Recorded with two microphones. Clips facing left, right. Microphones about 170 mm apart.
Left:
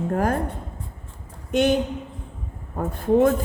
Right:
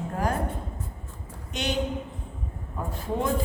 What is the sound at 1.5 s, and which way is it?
Speech, 50° left (ahead or behind).